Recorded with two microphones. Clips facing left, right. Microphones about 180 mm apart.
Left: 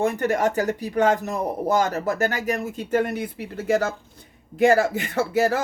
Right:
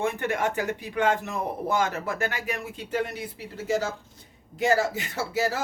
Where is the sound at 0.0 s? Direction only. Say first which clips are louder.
Left 5 dB; 40° left (ahead or behind).